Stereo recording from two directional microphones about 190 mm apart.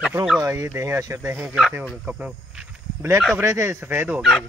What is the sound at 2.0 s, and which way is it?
Insect, 5° right (ahead or behind).